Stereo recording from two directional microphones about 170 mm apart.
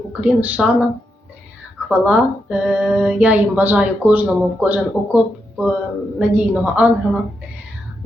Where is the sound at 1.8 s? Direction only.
5° right (ahead or behind).